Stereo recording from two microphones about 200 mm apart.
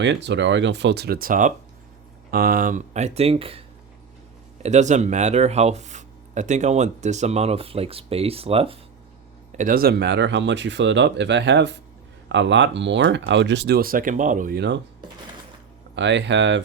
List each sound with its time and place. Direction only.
0.0 s speech: 60° right (ahead or behind); by 3.6 s 30° right (ahead or behind)
4.6 s speech: 35° right (ahead or behind)
9.5 s speech: 40° right (ahead or behind)
16.0 s speech: 60° right (ahead or behind)